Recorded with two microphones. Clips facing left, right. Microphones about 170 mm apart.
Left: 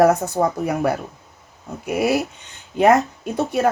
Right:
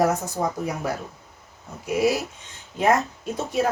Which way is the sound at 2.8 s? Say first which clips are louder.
Left 6 dB; 65° left (ahead or behind).